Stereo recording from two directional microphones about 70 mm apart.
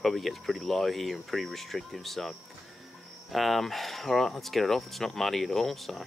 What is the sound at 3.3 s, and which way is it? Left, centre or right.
Speech, centre.